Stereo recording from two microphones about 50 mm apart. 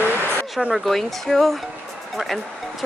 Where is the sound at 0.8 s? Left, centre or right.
Centre.